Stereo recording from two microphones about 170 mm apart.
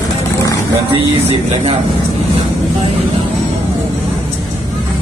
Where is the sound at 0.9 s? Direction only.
30° right (ahead or behind).